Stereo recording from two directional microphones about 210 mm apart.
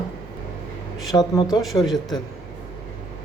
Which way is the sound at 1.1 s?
20° left (ahead or behind).